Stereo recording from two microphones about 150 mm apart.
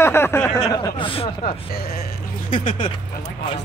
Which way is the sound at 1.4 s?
90° left.